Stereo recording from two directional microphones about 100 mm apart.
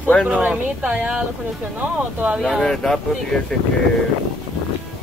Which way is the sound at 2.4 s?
5° left (ahead or behind).